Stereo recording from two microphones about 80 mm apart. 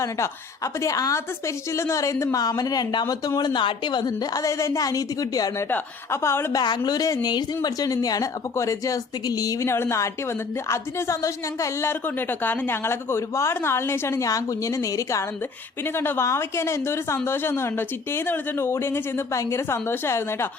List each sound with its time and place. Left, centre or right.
0.0 s a woman's voice: left
3.5 s a woman's voice: left
5.7 s speech: left
6.5 s a woman's voice: left
15.8 s speech: left